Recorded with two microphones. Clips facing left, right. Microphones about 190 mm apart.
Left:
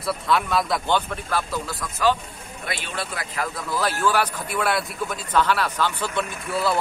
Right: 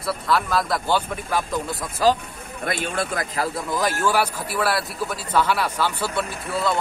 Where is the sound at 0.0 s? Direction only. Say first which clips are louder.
Even; centre (ahead or behind); by 1.9 s 20° right (ahead or behind).